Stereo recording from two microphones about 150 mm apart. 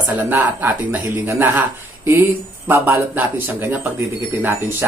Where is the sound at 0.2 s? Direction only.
10° right (ahead or behind).